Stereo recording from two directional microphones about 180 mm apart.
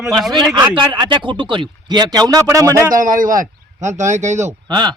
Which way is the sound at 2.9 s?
50° right (ahead or behind).